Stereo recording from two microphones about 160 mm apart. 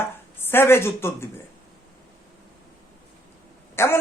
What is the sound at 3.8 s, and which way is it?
Speech, 15° left (ahead or behind).